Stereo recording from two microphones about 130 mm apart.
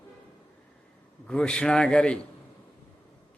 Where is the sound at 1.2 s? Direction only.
5° left (ahead or behind).